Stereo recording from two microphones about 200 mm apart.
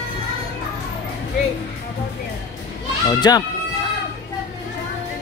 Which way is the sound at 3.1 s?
20° left (ahead or behind).